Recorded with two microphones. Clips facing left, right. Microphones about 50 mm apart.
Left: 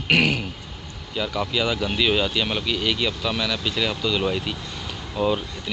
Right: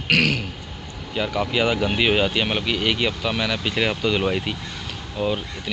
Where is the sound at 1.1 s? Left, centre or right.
Right.